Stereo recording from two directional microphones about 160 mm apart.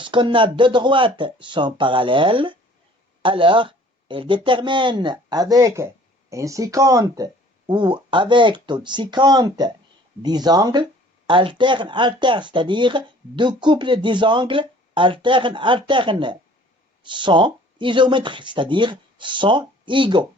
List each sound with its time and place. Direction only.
0.0 s speech: 30° right (ahead or behind)